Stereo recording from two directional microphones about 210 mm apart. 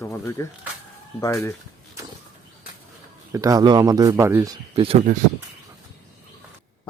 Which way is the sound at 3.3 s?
15° right (ahead or behind).